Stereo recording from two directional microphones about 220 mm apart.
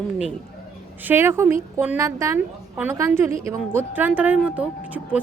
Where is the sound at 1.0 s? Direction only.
10° right (ahead or behind).